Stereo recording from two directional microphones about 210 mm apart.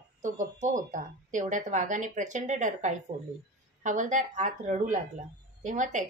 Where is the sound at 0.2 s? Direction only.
35° right (ahead or behind).